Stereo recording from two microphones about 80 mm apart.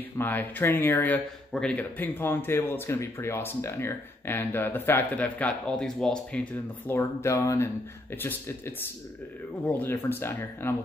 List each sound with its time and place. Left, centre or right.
0.2 s speech: left
1.5 s speech: centre
5.8 s speech: centre
6.3 s speech: left
7.0 s speech: left